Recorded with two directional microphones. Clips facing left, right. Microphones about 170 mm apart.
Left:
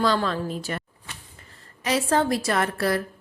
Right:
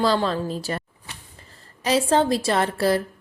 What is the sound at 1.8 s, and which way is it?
A woman's voice, 30° right (ahead or behind).